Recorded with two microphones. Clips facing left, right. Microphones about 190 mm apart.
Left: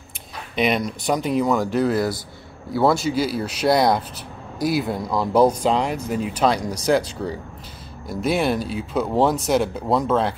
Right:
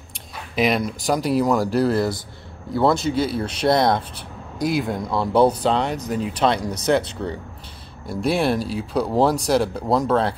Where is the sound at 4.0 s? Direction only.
30° right (ahead or behind).